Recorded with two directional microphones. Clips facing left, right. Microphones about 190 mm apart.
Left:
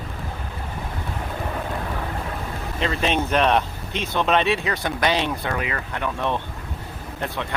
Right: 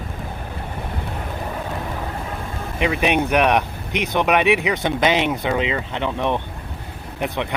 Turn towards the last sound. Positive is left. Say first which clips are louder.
# right 4 dB
turn(degrees=-20)  # may be behind; listen again after turning